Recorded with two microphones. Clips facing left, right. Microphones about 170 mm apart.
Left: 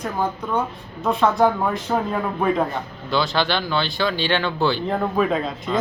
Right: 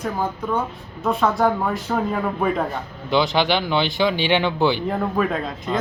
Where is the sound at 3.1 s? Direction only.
15° right (ahead or behind).